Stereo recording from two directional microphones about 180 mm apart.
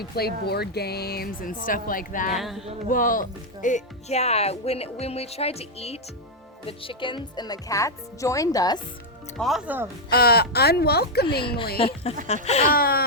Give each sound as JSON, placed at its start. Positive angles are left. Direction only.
{"t": 0.0, "sound": "speech", "side_deg": 60}
{"t": 2.3, "sound": "a sound", "side_deg": 0}
{"t": 2.9, "sound": "speech", "side_deg": 50}
{"t": 9.4, "sound": "speech", "side_deg": 0}
{"t": 10.1, "sound": "speech", "side_deg": 60}
{"t": 11.4, "sound": "speech", "side_deg": 30}
{"t": 12.7, "sound": "speech", "side_deg": 55}